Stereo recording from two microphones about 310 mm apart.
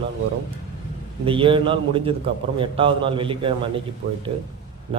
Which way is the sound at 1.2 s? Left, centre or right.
Centre.